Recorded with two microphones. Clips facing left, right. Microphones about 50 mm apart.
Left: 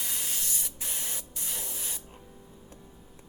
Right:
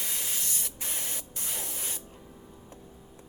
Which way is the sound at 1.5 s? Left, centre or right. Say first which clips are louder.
Right 1 dB; centre.